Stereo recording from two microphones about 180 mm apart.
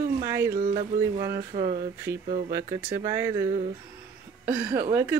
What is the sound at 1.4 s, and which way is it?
Speech, 35° right (ahead or behind).